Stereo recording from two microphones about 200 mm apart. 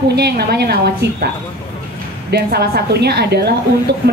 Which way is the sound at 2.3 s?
55° right (ahead or behind).